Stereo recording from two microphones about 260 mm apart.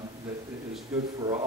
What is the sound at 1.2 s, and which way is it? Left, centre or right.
Speech, centre.